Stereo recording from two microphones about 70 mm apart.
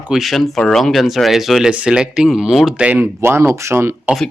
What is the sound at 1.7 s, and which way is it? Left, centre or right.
Speech, centre.